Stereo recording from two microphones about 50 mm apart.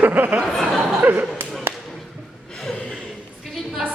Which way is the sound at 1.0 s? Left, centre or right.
Right.